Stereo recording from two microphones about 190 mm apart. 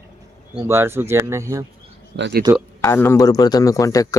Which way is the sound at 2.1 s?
70° right (ahead or behind).